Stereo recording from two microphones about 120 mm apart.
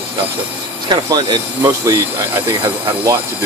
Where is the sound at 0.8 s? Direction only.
35° right (ahead or behind).